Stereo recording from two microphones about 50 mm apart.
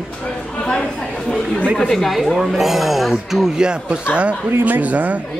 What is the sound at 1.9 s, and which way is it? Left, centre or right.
A man's voice, centre.